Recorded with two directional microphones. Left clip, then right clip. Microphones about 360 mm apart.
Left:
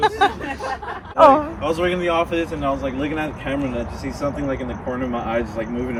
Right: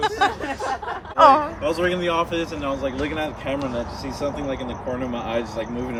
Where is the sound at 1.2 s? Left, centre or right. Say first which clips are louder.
Left 2 dB; centre.